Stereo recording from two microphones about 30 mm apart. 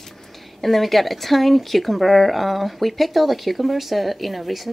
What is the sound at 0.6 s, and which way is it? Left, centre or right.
Speech, centre.